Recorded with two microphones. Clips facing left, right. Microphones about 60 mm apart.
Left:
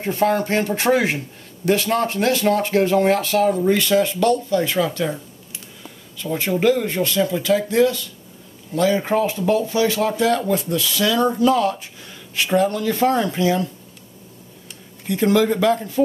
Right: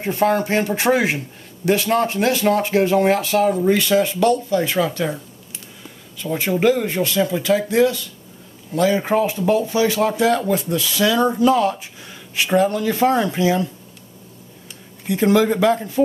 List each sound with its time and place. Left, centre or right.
0.0 s speech: centre
6.3 s speech: centre
15.0 s speech: centre